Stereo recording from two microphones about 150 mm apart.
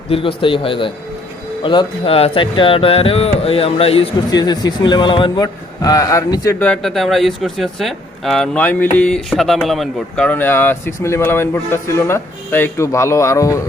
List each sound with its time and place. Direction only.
0.1 s speech: 35° left (ahead or behind)
4.3 s a man's voice: 25° left (ahead or behind)
6.6 s speech: 5° left (ahead or behind); by 13.6 s 20° left (ahead or behind)